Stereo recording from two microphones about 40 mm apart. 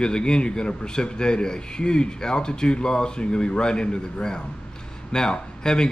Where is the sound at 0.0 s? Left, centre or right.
Left.